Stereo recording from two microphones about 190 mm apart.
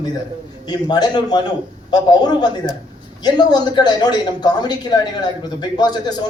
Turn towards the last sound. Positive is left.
turn(degrees=20)  # may be behind; listen again after turning